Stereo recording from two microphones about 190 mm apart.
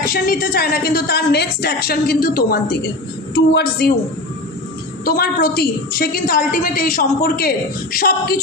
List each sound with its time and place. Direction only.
0.0 s a woman's voice: 50° left (ahead or behind)
5.0 s a woman's voice: 50° left (ahead or behind)